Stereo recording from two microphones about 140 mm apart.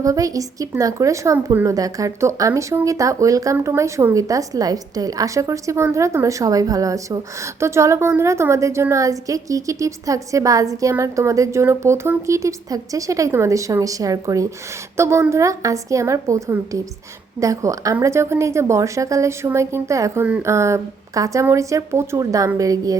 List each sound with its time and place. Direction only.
0.0 s speech: 25° right (ahead or behind)